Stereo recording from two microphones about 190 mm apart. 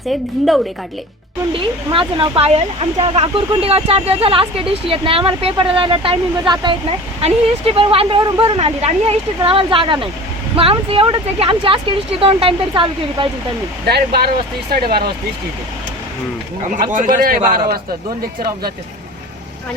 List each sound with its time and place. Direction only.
0.1 s a woman's voice: centre (ahead or behind)
1.5 s speech: 30° right (ahead or behind)
13.8 s a man's voice: 55° right (ahead or behind)
16.6 s a man's voice: 45° right (ahead or behind)